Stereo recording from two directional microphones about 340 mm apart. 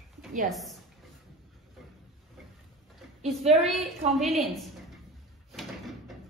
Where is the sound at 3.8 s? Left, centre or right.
Centre.